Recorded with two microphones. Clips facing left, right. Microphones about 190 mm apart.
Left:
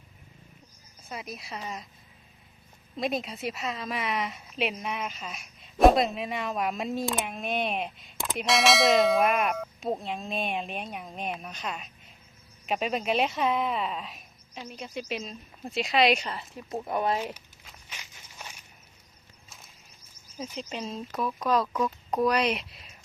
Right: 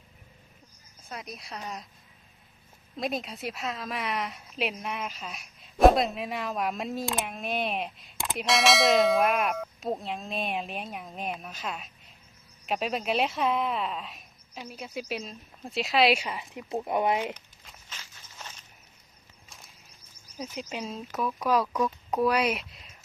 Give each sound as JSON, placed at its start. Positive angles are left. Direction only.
{"t": 1.0, "sound": "a woman's voice", "side_deg": 5}
{"t": 2.9, "sound": "a woman's voice", "side_deg": 0}
{"t": 17.3, "sound": "walk", "side_deg": 10}
{"t": 19.5, "sound": "a sound", "side_deg": 0}
{"t": 20.6, "sound": "a woman's voice", "side_deg": -5}